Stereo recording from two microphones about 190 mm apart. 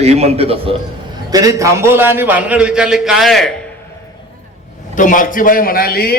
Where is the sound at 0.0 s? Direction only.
35° right (ahead or behind).